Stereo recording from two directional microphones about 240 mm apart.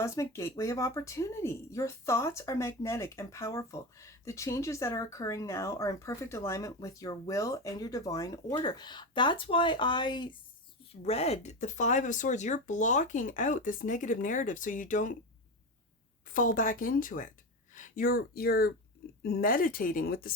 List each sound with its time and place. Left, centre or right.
0.0 s speech: centre; by 15.1 s left
16.2 s speech: left